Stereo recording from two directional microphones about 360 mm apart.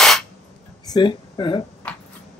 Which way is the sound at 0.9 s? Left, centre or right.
Centre.